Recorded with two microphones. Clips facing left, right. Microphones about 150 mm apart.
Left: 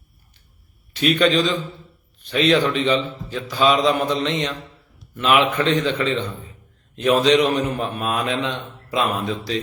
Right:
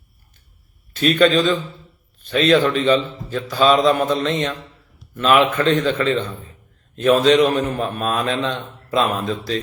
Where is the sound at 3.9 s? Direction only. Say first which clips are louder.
Right 2 dB; 50° right (ahead or behind).